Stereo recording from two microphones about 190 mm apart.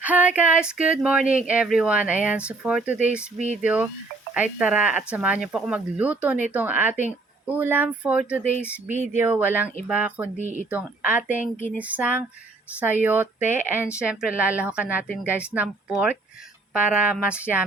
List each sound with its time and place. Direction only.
0.0 s speech: 10° right (ahead or behind)
10.3 s speech: 40° right (ahead or behind)
10.7 s speech: 10° right (ahead or behind)
11.3 s a woman's voice: 40° left (ahead or behind)
11.8 s speech: 5° right (ahead or behind)